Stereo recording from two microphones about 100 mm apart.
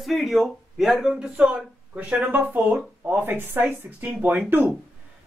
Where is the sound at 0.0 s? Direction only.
Centre (ahead or behind).